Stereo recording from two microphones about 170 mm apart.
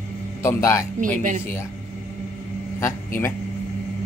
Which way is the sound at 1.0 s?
50° right (ahead or behind).